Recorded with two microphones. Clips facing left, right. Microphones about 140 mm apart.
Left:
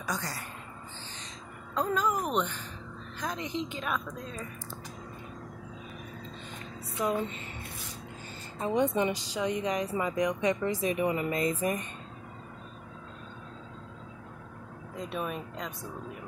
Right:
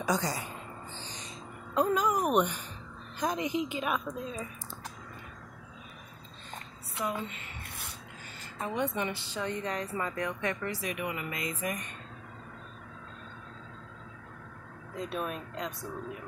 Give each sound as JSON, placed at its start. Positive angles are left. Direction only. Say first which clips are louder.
{"t": 0.0, "sound": "a woman's voice", "louder": "right 5 dB", "side_deg": -20}
{"t": 1.8, "sound": "a woman's voice", "louder": "right 2 dB", "side_deg": -15}
{"t": 8.5, "sound": "a woman's voice", "louder": "left 5 dB", "side_deg": 20}
{"t": 15.0, "sound": "speech", "louder": "even", "side_deg": 0}